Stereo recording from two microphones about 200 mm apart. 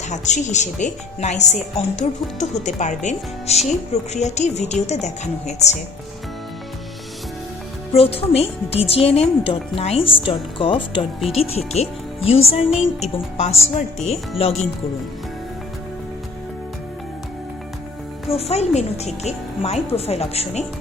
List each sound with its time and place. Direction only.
0.1 s speech: 35° left (ahead or behind)
7.9 s speech: 30° left (ahead or behind)
18.3 s speech: 30° left (ahead or behind)